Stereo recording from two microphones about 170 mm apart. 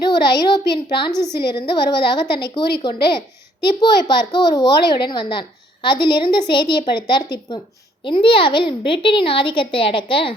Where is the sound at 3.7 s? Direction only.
25° left (ahead or behind).